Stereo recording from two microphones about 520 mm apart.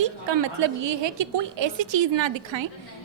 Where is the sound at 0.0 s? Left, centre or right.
Right.